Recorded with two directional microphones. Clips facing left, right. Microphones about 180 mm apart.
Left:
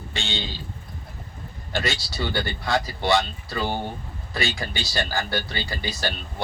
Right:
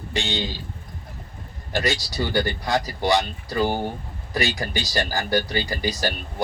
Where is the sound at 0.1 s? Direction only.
15° right (ahead or behind).